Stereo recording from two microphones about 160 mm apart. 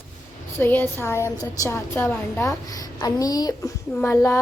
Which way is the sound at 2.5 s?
20° left (ahead or behind).